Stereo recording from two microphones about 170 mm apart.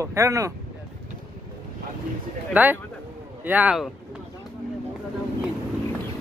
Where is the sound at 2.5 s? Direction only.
10° right (ahead or behind).